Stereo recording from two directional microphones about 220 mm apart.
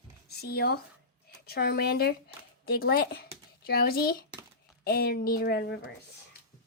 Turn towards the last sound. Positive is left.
turn(degrees=50)  # may be behind; listen again after turning